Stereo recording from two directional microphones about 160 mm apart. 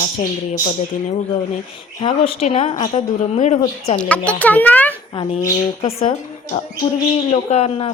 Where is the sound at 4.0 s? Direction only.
5° left (ahead or behind).